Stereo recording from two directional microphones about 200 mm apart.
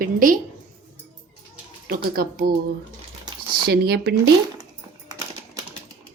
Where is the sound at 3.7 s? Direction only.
55° right (ahead or behind).